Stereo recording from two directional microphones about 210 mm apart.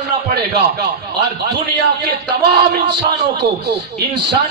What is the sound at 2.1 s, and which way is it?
Speech, 55° right (ahead or behind).